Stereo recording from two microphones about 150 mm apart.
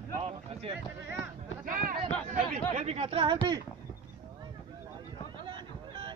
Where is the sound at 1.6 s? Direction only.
65° right (ahead or behind).